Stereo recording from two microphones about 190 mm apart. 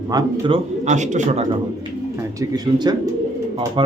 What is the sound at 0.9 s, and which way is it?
Speech, 40° right (ahead or behind).